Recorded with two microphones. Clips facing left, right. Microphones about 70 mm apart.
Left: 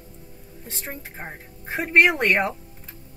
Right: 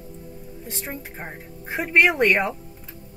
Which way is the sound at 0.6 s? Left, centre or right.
Centre.